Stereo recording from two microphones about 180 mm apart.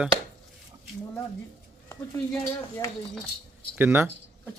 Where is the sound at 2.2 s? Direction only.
30° right (ahead or behind).